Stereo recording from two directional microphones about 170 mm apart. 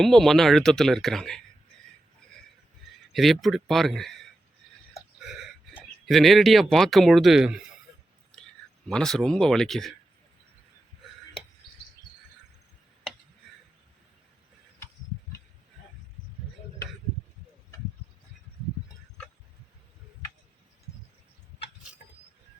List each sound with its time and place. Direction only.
0.0 s speech: centre (ahead or behind)
3.1 s speech: centre (ahead or behind)
5.2 s a sound: 5° right (ahead or behind)
6.1 s speech: centre (ahead or behind)
8.3 s clicking: 5° left (ahead or behind)
8.9 s speech: 5° left (ahead or behind)